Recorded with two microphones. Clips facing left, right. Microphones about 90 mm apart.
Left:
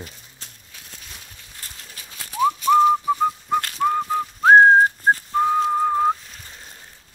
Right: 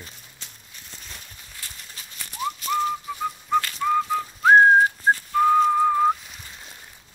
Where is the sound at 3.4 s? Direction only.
50° left (ahead or behind).